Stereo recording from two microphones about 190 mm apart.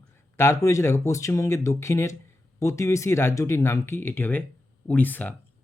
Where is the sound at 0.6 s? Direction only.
15° left (ahead or behind).